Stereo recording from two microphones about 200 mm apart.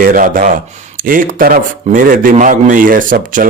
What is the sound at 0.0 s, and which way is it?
A man's voice, 45° right (ahead or behind).